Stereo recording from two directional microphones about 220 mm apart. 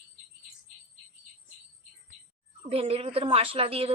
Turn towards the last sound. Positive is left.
turn(degrees=-25)  # may be behind; listen again after turning